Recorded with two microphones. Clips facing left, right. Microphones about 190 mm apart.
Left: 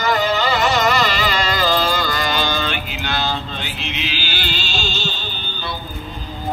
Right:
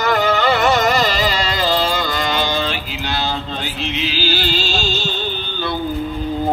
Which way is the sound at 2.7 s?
35° right (ahead or behind).